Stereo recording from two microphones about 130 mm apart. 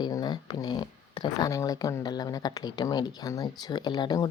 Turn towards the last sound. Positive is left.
turn(degrees=30)  # may be behind; listen again after turning